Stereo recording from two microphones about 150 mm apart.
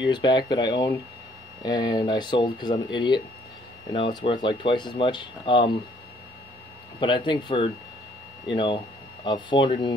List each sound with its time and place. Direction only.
0.1 s speech: 30° left (ahead or behind)
7.0 s speech: 30° left (ahead or behind)